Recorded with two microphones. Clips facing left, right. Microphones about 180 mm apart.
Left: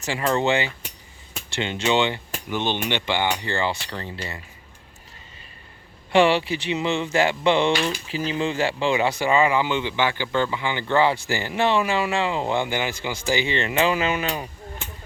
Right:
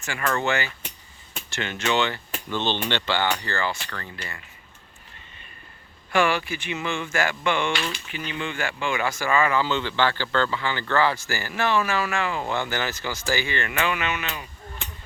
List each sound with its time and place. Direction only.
0.0 s cutlery: 25° left (ahead or behind)
6.1 s cutlery: 25° left (ahead or behind)
7.7 s speech: 35° left (ahead or behind); by 11.2 s 20° left (ahead or behind)
11.3 s cutlery: 20° left (ahead or behind)